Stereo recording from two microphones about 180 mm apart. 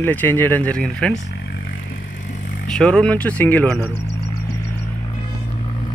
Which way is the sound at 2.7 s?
5° left (ahead or behind).